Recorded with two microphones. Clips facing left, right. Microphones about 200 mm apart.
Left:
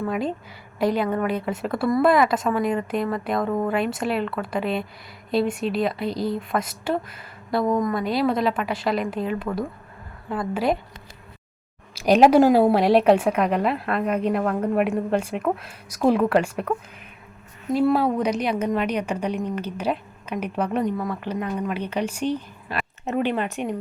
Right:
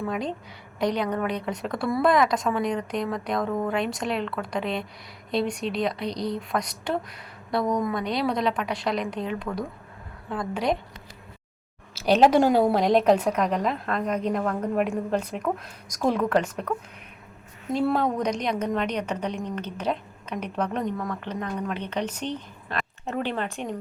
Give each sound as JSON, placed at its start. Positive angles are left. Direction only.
{"t": 0.0, "sound": "a woman's voice", "side_deg": 5}
{"t": 11.9, "sound": "a woman's voice", "side_deg": 10}